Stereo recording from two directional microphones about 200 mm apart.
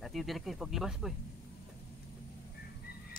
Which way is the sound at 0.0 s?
Centre (ahead or behind).